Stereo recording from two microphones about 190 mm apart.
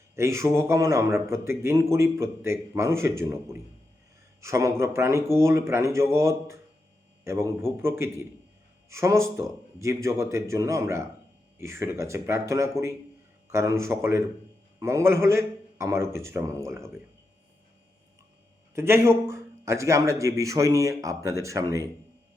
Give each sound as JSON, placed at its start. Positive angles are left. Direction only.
{"t": 0.2, "sound": "a man's voice", "side_deg": -15}
{"t": 18.7, "sound": "a man's voice", "side_deg": -15}